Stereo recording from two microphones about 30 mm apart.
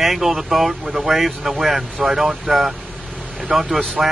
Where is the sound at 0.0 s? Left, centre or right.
Centre.